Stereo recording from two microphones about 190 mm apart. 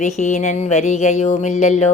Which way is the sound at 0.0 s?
35° left (ahead or behind).